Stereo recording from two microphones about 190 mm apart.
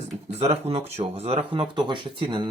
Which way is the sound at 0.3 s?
35° right (ahead or behind).